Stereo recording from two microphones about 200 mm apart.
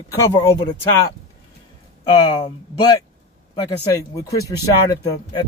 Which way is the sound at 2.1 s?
20° left (ahead or behind).